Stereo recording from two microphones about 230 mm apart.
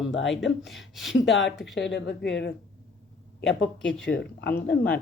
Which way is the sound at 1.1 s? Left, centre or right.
Left.